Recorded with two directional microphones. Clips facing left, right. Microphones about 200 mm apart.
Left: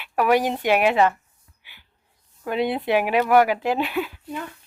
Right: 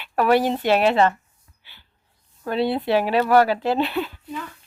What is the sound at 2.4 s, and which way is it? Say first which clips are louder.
Speech: right 1 dB; 15° left (ahead or behind).